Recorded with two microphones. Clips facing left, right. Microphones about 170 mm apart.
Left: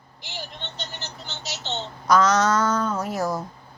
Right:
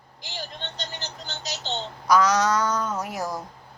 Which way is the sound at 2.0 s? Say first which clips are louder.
Left 1 dB; 10° right (ahead or behind).